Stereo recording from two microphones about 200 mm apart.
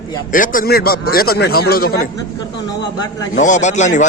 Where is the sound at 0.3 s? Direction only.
40° left (ahead or behind).